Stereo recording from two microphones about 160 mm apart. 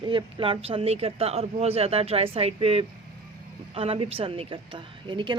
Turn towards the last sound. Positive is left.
turn(degrees=-30)  # may be behind; listen again after turning